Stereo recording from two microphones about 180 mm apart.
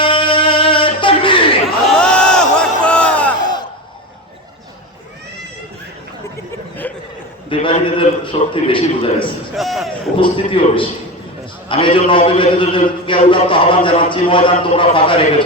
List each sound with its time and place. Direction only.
0.0 s music: 30° left (ahead or behind)
2.0 s crowd: 5° left (ahead or behind)
7.5 s a man's voice: 30° left (ahead or behind)
9.6 s speech: centre (ahead or behind)
10.2 s a man's voice: 30° left (ahead or behind)